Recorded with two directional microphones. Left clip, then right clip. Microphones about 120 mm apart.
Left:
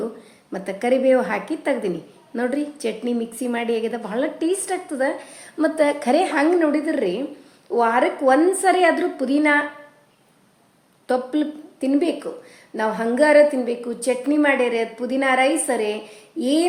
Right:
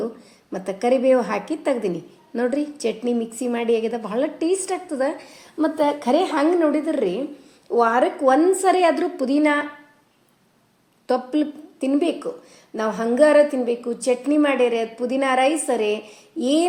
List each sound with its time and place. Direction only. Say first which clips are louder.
0.5 s a woman's voice: even; 25° right (ahead or behind)
5.5 s a woman's voice: left 1 dB; 5° right (ahead or behind); by 9.6 s 25° right (ahead or behind)
11.0 s a woman's voice: even; 25° right (ahead or behind)